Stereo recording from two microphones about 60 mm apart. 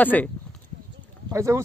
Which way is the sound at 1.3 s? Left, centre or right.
Right.